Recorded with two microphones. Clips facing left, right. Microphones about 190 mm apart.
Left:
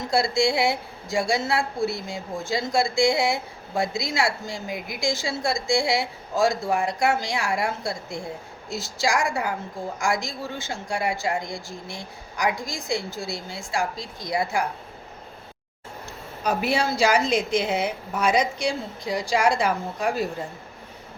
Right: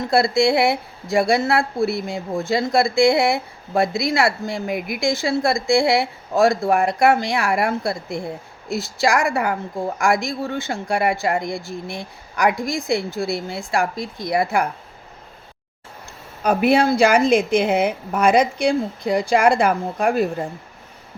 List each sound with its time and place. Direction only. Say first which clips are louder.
0.1 s a woman's voice: right 5 dB; 60° right (ahead or behind)
16.4 s a woman's voice: right 7 dB; 60° right (ahead or behind)